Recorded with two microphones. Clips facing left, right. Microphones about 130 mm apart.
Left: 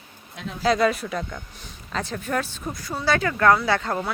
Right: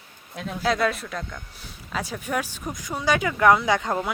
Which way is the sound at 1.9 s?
10° right (ahead or behind).